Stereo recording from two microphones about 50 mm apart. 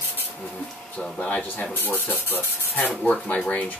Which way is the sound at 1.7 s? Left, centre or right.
Left.